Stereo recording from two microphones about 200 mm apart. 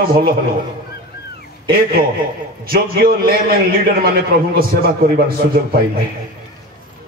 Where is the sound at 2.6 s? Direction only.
50° right (ahead or behind).